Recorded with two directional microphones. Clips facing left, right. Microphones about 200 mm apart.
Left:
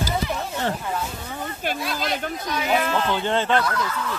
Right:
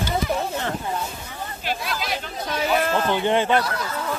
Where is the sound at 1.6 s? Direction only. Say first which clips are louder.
Left 1 dB; 50° left (ahead or behind).